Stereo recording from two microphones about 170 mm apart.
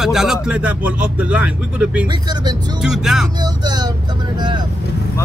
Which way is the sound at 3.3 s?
25° right (ahead or behind).